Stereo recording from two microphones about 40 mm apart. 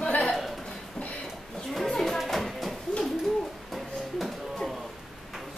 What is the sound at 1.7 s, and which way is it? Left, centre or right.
Children playing, centre.